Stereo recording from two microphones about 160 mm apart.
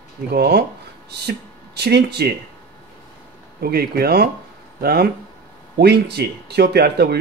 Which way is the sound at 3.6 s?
75° right (ahead or behind).